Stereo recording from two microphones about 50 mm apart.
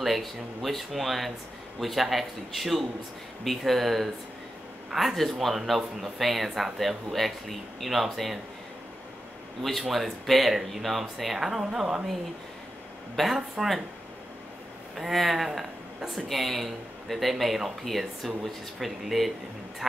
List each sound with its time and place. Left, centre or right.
0.0 s a man's voice: centre
9.6 s a man's voice: centre
13.1 s a man's voice: centre
15.0 s a man's voice: centre